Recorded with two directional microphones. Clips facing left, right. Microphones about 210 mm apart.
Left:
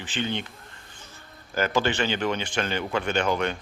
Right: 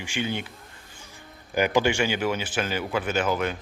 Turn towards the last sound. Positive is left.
turn(degrees=-5)  # may be behind; listen again after turning